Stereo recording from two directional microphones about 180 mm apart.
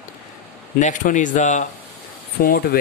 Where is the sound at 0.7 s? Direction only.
45° left (ahead or behind).